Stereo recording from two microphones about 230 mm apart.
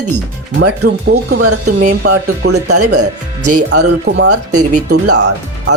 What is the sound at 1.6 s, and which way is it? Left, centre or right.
Speech, right.